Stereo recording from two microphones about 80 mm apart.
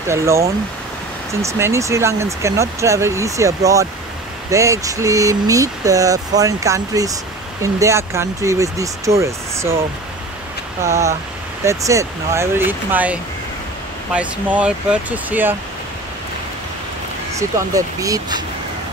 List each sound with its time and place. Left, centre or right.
0.1 s speech: right
10.8 s speech: right
17.3 s speech: right